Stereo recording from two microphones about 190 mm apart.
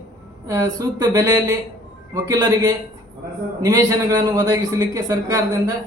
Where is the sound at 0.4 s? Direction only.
20° right (ahead or behind).